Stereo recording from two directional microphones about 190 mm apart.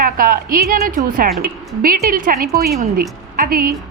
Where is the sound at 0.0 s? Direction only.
50° right (ahead or behind).